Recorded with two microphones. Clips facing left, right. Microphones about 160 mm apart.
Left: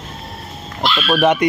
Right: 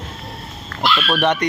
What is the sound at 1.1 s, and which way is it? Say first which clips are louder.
Speech: left 6 dB; 10° left (ahead or behind).